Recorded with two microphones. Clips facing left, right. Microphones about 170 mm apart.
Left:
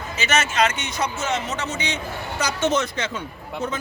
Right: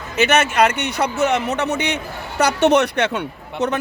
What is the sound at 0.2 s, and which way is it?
Speech, 60° right (ahead or behind).